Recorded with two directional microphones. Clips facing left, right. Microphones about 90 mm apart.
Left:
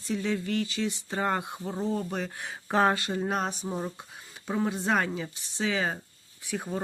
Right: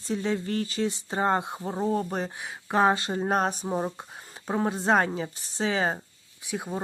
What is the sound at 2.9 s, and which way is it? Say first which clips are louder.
Speech: right 3 dB; 35° right (ahead or behind).